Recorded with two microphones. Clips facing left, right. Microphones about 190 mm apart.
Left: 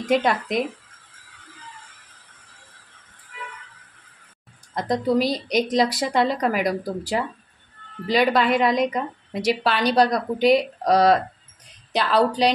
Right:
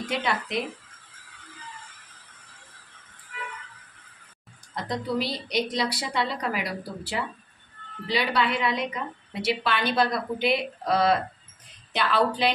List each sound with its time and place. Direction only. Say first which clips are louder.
0.1 s a woman's voice: left 9 dB; 45° left (ahead or behind)
4.7 s a woman's voice: left 7 dB; 45° left (ahead or behind)